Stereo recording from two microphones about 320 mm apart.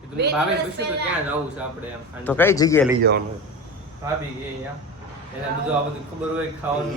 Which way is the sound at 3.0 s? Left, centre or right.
Right.